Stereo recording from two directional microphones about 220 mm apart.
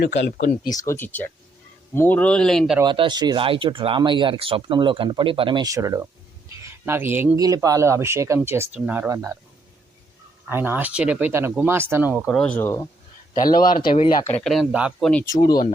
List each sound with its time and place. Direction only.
0.0 s speech: 50° left (ahead or behind)
0.6 s speech: 15° left (ahead or behind)
2.8 s speech: 20° right (ahead or behind)
10.4 s speech: 10° right (ahead or behind); by 13.6 s 15° left (ahead or behind)
13.9 s speech: 30° left (ahead or behind)
14.3 s speech: 5° left (ahead or behind)
15.1 s speech: 10° left (ahead or behind)